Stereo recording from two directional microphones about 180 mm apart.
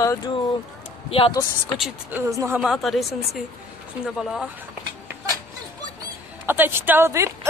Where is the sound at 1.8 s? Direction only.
10° right (ahead or behind).